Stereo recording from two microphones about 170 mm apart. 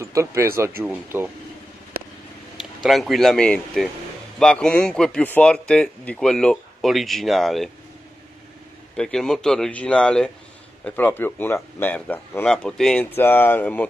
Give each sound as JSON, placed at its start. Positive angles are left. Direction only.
{"t": 0.0, "sound": "speech", "side_deg": -15}
{"t": 2.8, "sound": "speech", "side_deg": 0}
{"t": 8.9, "sound": "speech", "side_deg": 5}